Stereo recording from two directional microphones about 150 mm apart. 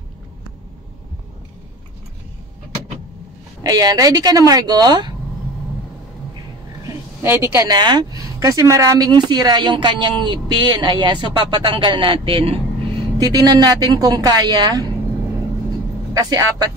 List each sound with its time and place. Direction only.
3.6 s a woman's voice: 25° right (ahead or behind)
7.2 s a woman's voice: 15° right (ahead or behind)
7.7 s speech: 30° right (ahead or behind)
13.2 s a woman's voice: 25° right (ahead or behind)
16.1 s a woman's voice: 25° right (ahead or behind)